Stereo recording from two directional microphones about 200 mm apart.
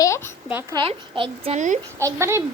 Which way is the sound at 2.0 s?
15° right (ahead or behind).